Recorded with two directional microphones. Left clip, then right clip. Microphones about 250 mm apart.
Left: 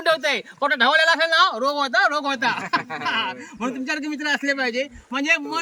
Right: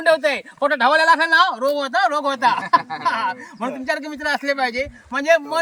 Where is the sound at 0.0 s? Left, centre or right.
Centre.